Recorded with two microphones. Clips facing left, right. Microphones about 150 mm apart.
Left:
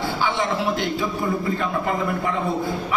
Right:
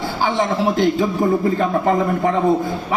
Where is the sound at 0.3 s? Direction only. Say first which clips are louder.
Right 5 dB; 40° right (ahead or behind).